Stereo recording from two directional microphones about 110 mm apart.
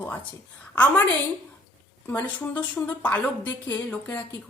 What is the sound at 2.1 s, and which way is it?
A woman's voice, 15° left (ahead or behind).